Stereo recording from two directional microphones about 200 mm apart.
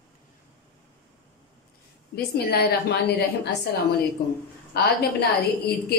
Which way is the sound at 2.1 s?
50° left (ahead or behind).